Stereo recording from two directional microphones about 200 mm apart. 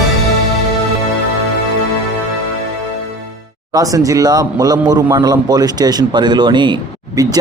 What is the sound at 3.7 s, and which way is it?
A man's voice, 15° right (ahead or behind).